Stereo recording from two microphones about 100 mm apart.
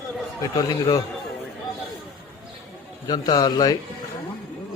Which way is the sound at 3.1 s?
40° left (ahead or behind).